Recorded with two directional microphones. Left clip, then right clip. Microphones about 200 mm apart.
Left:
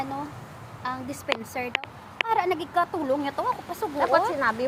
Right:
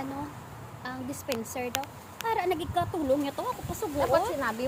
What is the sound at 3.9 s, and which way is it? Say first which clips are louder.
Speech: left 3 dB; 30° left (ahead or behind).